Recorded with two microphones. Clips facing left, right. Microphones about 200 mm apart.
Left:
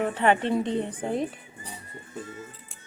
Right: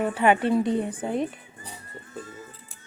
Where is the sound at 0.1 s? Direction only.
10° right (ahead or behind).